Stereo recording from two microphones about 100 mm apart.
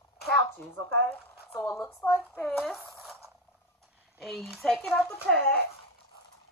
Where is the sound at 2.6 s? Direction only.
Centre (ahead or behind).